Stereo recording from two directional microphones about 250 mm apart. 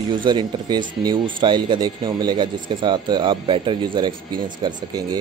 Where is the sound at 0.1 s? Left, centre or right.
Centre.